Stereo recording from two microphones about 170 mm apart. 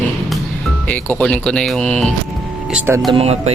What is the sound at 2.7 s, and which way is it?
Speech, 15° right (ahead or behind).